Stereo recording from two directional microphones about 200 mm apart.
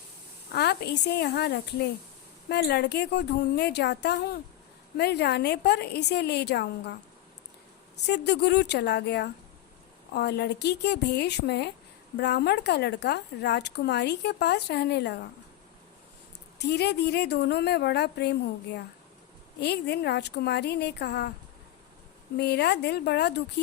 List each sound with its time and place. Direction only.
0.5 s speech: 55° left (ahead or behind)
8.0 s speech: 55° left (ahead or behind)
16.6 s speech: 55° left (ahead or behind)
22.4 s speech: 55° left (ahead or behind)